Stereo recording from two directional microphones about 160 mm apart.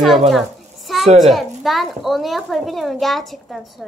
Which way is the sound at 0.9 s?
Centre (ahead or behind).